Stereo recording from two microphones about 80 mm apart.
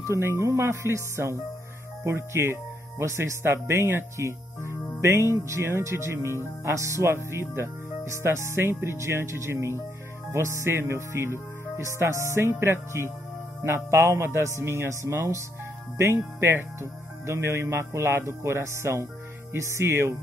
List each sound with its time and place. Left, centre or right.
0.0 s speech: right